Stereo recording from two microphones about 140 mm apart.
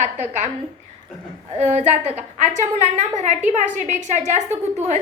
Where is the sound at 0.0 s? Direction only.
60° right (ahead or behind).